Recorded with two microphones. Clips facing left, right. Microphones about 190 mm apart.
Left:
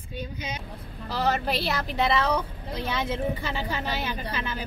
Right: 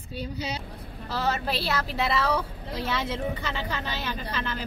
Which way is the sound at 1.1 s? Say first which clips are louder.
Left 2 dB; centre (ahead or behind).